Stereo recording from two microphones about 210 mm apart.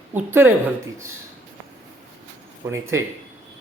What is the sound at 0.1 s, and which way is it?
Speech, 10° right (ahead or behind).